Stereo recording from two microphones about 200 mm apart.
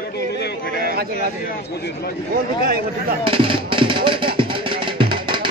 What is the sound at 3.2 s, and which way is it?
Music, 25° right (ahead or behind).